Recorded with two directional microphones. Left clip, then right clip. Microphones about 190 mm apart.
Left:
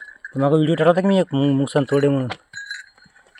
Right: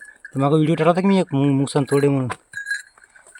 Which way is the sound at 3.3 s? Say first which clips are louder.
Right 4 dB; 35° right (ahead or behind).